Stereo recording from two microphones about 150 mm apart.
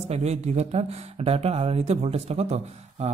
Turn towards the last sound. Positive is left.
turn(degrees=-45)  # may be behind; listen again after turning